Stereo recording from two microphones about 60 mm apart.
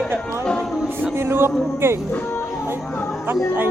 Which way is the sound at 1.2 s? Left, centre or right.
Right.